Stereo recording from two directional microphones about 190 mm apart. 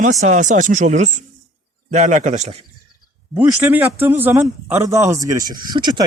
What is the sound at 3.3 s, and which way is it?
Speech, 10° right (ahead or behind).